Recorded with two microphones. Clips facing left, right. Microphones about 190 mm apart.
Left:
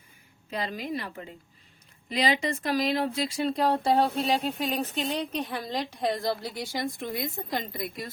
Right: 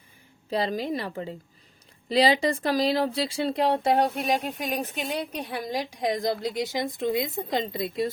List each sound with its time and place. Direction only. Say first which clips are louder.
0.5 s speech: right 5 dB; 35° right (ahead or behind)
4.2 s a woman's voice: even; 15° right (ahead or behind)